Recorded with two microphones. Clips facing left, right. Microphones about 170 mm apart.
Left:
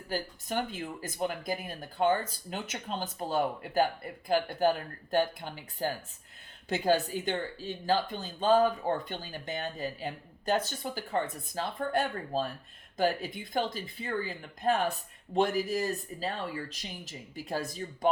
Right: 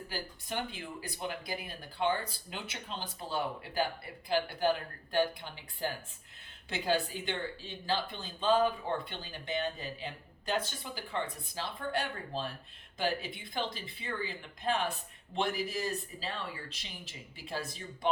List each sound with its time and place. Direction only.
0.1 s speech: 45° left (ahead or behind)